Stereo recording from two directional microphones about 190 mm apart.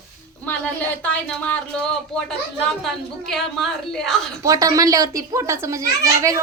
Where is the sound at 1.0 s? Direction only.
5° left (ahead or behind).